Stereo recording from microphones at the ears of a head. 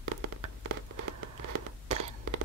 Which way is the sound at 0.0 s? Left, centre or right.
Right.